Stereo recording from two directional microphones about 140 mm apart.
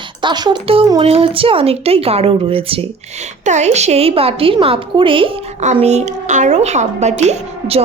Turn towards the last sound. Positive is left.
turn(degrees=-50)  # may be behind; listen again after turning